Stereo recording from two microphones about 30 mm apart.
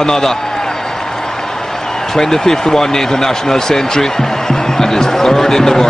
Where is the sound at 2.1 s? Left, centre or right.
Centre.